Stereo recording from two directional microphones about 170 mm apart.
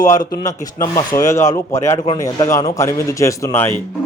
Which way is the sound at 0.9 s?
15° left (ahead or behind).